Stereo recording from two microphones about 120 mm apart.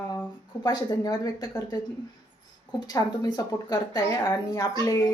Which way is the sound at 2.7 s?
30° left (ahead or behind).